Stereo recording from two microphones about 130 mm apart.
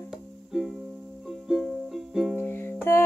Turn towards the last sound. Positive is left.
turn(degrees=20)  # may be behind; listen again after turning